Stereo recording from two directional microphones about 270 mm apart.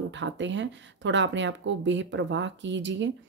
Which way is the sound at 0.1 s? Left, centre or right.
Right.